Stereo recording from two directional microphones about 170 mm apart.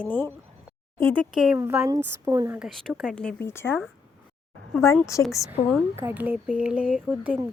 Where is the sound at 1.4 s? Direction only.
10° right (ahead or behind).